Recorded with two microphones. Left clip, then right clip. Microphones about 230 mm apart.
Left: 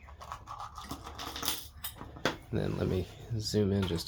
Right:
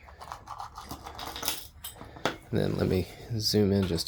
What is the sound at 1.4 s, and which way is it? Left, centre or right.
Coin, centre.